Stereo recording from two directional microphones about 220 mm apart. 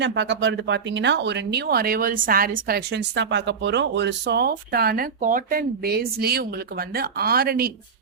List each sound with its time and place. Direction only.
0.0 s speech: 55° right (ahead or behind)